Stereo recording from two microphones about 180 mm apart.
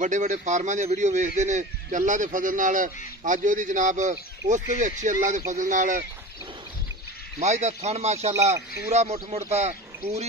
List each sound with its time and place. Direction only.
0.0 s a man's voice: 45° right (ahead or behind)
7.3 s speech: 40° right (ahead or behind)